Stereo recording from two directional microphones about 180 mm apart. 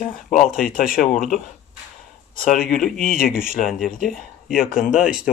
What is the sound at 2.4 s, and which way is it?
Speech, 50° left (ahead or behind).